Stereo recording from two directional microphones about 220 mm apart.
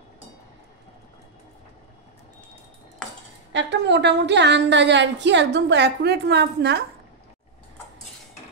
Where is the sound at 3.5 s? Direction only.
55° right (ahead or behind).